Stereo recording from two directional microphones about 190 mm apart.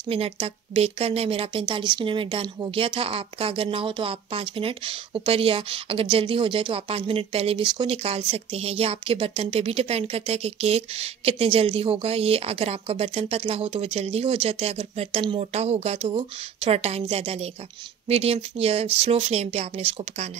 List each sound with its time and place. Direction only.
0.1 s speech: 30° right (ahead or behind)